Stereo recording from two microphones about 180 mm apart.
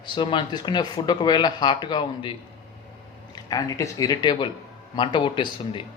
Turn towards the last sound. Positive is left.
turn(degrees=25)  # may be behind; listen again after turning